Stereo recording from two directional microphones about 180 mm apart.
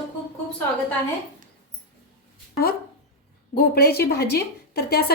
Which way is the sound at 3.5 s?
60° left (ahead or behind).